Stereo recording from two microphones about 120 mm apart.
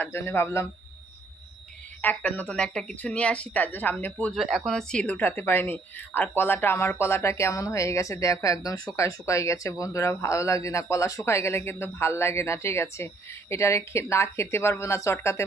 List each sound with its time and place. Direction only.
0.0 s speech: 20° left (ahead or behind)
2.0 s speech: 15° left (ahead or behind)
4.3 s speech: centre (ahead or behind)
5.1 s speech: 20° left (ahead or behind)